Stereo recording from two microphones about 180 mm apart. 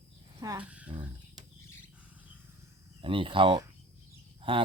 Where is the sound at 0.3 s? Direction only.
25° right (ahead or behind).